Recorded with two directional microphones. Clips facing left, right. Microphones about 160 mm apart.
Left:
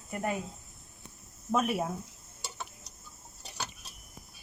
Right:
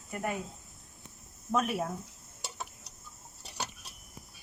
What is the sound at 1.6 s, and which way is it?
Speech, 10° left (ahead or behind).